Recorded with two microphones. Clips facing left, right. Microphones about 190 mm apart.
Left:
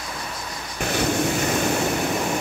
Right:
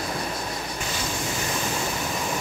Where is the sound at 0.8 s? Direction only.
60° left (ahead or behind).